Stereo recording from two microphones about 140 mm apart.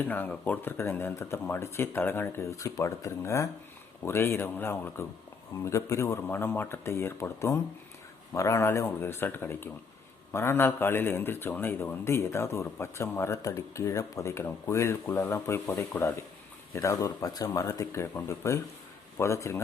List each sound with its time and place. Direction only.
0.1 s a man's voice: 10° left (ahead or behind)